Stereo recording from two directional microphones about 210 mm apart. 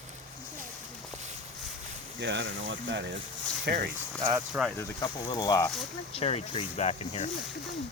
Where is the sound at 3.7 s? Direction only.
45° right (ahead or behind).